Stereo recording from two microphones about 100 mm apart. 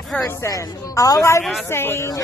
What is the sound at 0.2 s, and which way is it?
A woman's voice, 35° left (ahead or behind).